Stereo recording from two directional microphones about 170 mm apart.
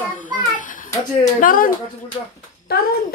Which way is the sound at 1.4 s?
55° left (ahead or behind).